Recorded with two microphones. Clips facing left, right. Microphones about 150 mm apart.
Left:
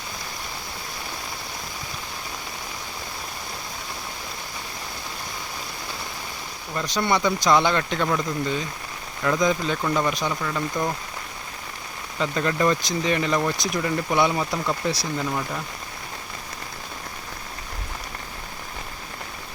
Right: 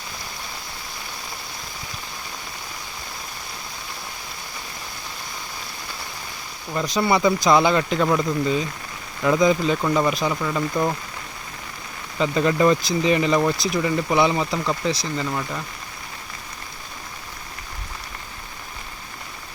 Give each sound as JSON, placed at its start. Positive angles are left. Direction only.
{"t": 6.7, "sound": "speech", "side_deg": -5}
{"t": 12.2, "sound": "speech", "side_deg": -5}